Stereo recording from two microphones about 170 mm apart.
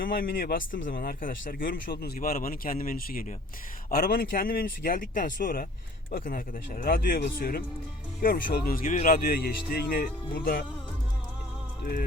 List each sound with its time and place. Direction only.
0.0 s speech: 55° left (ahead or behind)